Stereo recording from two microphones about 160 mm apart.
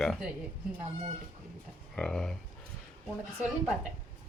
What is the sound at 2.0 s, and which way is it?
Speech, 5° left (ahead or behind).